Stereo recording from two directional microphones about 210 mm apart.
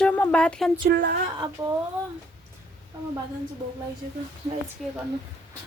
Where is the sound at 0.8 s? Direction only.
50° right (ahead or behind).